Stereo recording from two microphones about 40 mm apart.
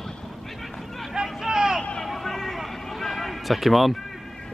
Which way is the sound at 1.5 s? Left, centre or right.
Centre.